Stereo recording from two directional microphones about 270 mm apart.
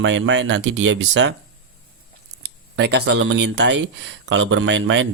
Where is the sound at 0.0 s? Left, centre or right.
Right.